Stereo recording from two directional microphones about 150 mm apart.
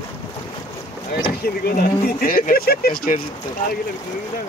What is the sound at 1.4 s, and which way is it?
Speech, 90° left.